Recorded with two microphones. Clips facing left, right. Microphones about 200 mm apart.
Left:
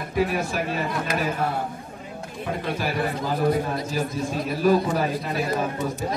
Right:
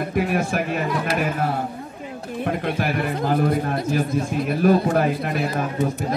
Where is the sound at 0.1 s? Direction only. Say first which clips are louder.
Left 1 dB; 55° right (ahead or behind).